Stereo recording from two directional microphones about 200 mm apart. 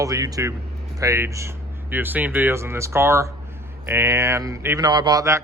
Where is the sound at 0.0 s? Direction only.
15° right (ahead or behind).